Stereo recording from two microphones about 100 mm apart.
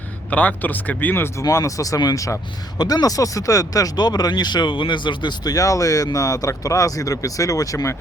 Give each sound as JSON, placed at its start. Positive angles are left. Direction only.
{"t": 0.3, "sound": "speech", "side_deg": 15}